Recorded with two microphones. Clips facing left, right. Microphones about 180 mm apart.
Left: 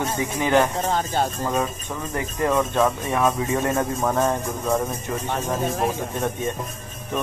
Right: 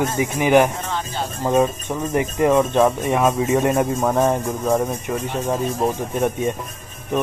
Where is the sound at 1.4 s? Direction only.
20° right (ahead or behind).